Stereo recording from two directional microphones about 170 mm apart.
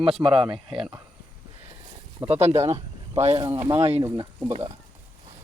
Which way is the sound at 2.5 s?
20° right (ahead or behind).